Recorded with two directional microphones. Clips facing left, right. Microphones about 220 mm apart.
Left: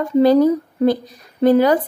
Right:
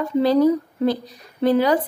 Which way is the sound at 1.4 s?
50° left (ahead or behind).